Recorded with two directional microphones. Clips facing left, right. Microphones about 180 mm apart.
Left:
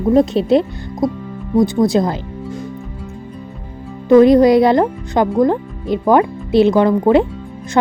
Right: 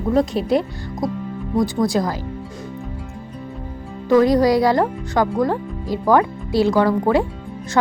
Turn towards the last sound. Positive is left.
turn(degrees=20)  # may be behind; listen again after turning